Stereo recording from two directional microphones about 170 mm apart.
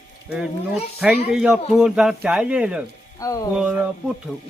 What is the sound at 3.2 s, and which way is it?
Speech, 20° left (ahead or behind).